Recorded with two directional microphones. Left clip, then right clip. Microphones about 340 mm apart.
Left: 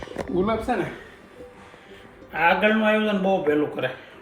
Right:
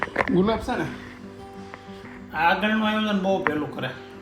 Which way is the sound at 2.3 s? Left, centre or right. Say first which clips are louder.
Left 2 dB; centre.